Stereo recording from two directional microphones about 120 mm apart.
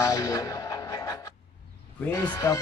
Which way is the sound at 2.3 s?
25° left (ahead or behind).